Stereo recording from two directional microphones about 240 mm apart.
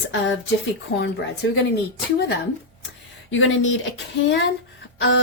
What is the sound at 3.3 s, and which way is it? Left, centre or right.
Speech, left.